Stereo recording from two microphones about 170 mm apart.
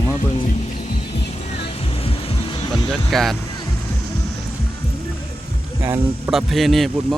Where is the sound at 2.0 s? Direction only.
30° left (ahead or behind).